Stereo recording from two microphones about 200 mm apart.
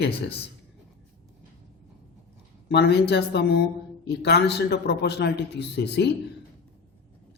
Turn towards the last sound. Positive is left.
turn(degrees=55)  # may be behind; listen again after turning